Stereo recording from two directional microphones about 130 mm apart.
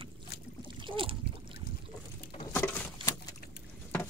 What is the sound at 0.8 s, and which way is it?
Speech, 40° right (ahead or behind).